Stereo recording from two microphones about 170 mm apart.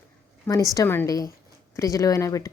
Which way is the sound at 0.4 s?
20° left (ahead or behind).